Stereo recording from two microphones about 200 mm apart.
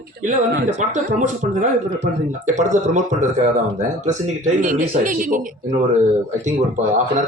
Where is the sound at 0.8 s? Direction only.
35° right (ahead or behind).